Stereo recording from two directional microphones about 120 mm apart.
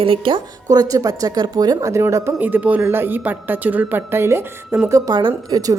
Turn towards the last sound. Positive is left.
turn(degrees=-35)  # may be behind; listen again after turning